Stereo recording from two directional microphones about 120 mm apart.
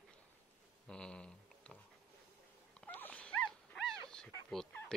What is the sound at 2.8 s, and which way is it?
Dog, 10° left (ahead or behind).